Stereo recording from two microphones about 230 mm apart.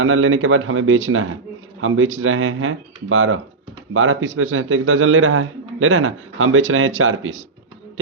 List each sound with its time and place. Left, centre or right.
0.0 s a man's voice: right